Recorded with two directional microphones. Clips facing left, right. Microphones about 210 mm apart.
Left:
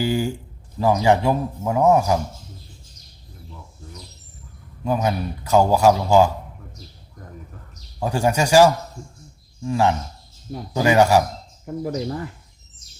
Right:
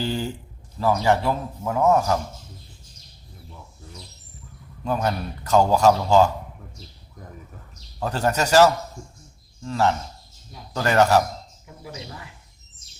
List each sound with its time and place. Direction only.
0.0 s a man's voice: 10° left (ahead or behind)
4.8 s a man's voice: 10° left (ahead or behind)
7.9 s a man's voice: 10° left (ahead or behind)
11.6 s speech: 50° left (ahead or behind)